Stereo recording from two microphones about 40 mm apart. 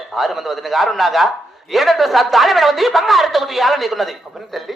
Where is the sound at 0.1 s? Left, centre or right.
Centre.